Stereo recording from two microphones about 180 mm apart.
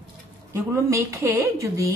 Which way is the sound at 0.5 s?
15° right (ahead or behind).